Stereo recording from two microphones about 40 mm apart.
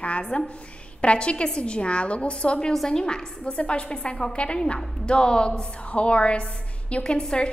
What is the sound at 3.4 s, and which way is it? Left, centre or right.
A woman's voice, left.